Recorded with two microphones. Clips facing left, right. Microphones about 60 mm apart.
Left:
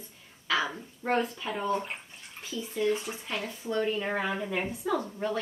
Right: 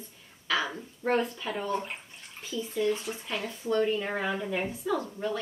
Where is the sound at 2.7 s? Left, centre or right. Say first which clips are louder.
Left 1 dB; centre.